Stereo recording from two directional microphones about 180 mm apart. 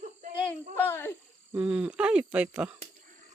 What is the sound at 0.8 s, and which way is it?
Speech, 10° left (ahead or behind).